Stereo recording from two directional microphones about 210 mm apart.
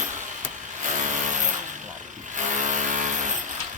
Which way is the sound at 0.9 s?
35° right (ahead or behind).